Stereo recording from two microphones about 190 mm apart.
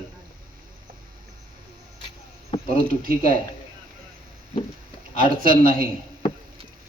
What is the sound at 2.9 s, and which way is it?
Speech, 50° right (ahead or behind).